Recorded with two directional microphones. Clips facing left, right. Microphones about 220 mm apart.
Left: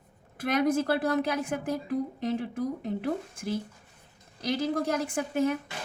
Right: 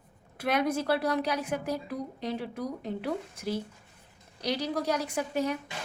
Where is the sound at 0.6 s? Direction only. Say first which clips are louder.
Left 2 dB; 50° left (ahead or behind).